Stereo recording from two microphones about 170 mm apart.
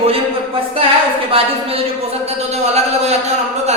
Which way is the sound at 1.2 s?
35° right (ahead or behind).